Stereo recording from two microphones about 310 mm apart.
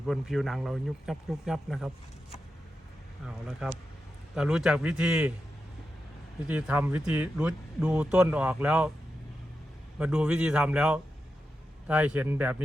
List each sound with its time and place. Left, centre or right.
0.0 s speech: centre
3.2 s speech: centre
6.5 s speech: centre
10.0 s speech: centre